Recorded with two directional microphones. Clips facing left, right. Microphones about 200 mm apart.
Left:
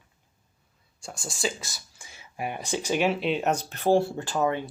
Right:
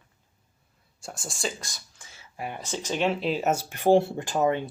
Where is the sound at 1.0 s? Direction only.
Centre (ahead or behind).